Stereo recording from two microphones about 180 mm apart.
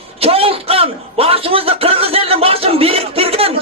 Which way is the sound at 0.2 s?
30° right (ahead or behind).